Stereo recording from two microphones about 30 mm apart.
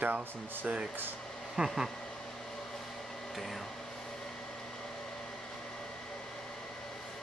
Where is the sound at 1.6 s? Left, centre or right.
Centre.